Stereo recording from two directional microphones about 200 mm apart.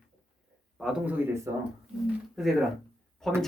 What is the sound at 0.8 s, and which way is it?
Speech, 5° right (ahead or behind).